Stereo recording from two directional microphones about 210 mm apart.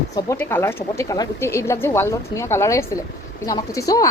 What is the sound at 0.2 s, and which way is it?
Speech, 10° left (ahead or behind).